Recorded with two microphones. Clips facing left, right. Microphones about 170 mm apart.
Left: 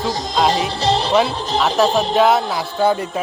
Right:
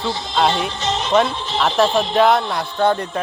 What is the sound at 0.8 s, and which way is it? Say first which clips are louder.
Speech: left 4 dB; 35° left (ahead or behind).